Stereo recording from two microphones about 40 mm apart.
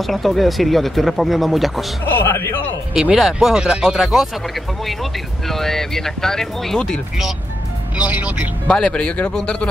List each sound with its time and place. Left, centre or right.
0.0 s speech: centre
2.2 s speech: left
2.9 s speech: centre
5.5 s speech: centre
8.0 s speech: right
8.6 s speech: left